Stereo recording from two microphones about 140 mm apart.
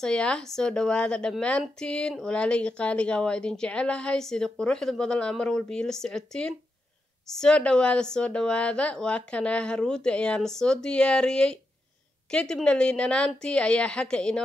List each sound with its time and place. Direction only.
0.0 s speech: 5° left (ahead or behind)